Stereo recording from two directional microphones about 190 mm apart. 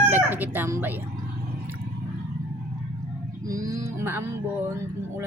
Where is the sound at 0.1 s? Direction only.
10° right (ahead or behind).